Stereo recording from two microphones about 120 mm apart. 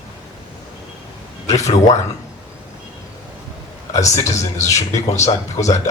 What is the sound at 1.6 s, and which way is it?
Speech, 75° left (ahead or behind).